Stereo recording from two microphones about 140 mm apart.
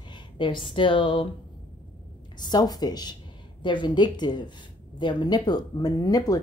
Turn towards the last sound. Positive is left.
turn(degrees=25)  # may be behind; listen again after turning